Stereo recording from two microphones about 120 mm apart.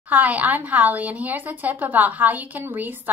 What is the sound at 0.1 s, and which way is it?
A woman's voice, 15° right (ahead or behind).